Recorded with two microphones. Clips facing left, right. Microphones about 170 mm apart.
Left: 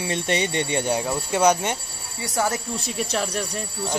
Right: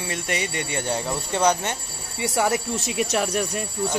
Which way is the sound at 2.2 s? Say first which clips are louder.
Right 2 dB; 15° right (ahead or behind).